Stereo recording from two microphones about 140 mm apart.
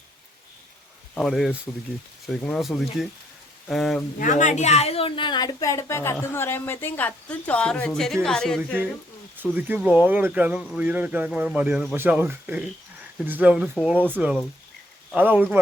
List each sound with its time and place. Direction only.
1.1 s speech: centre (ahead or behind)
4.2 s a woman's voice: 65° left (ahead or behind); by 8.6 s 5° left (ahead or behind)
9.4 s speech: 15° right (ahead or behind)